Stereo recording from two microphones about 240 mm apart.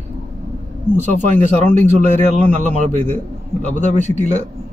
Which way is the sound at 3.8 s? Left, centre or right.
Left.